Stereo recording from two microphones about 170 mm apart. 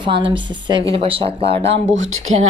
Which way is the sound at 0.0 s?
30° right (ahead or behind).